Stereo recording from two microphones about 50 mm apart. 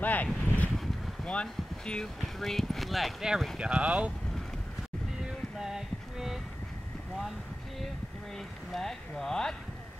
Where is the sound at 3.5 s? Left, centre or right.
Right.